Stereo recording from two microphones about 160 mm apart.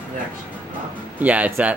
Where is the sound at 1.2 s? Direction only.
10° right (ahead or behind).